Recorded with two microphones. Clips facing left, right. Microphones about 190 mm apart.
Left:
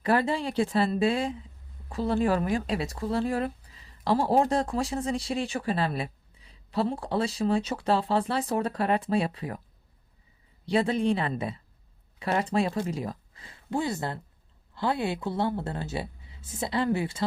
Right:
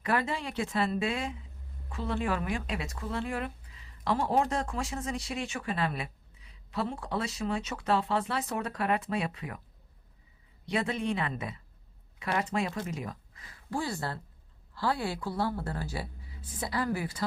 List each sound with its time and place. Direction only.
0.0 s speech: 30° left (ahead or behind)
10.7 s a woman's voice: 30° left (ahead or behind)